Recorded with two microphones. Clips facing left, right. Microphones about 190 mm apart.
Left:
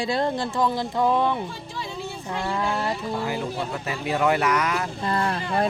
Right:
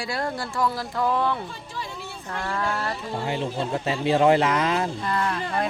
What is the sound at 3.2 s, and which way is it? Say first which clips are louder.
Speech: right 1 dB; 25° right (ahead or behind).